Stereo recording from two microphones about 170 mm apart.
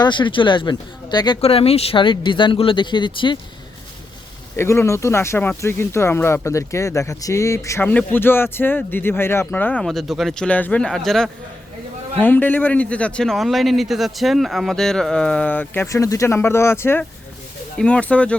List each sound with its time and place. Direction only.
0.0 s speech: 30° left (ahead or behind)
1.4 s speech: 35° left (ahead or behind)
4.5 s speech: 15° left (ahead or behind)